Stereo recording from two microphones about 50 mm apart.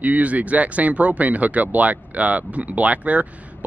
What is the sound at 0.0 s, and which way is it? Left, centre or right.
Speech, right.